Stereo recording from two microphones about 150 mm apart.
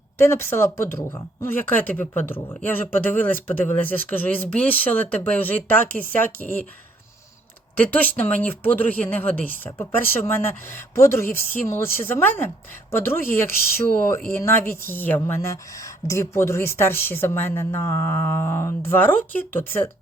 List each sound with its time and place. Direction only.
0.2 s a woman's voice: 15° left (ahead or behind)
7.8 s a woman's voice: 10° left (ahead or behind)